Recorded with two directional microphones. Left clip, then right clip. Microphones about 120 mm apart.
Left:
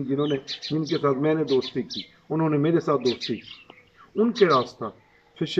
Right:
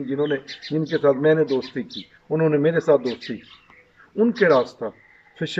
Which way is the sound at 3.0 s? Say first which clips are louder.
Left 2 dB; 25° left (ahead or behind).